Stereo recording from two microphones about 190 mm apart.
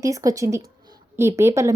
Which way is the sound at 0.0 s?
15° right (ahead or behind).